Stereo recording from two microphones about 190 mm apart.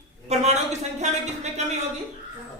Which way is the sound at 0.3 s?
35° right (ahead or behind).